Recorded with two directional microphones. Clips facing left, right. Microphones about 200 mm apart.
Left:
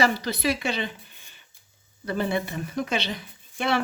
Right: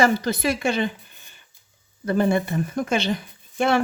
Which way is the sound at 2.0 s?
50° right (ahead or behind).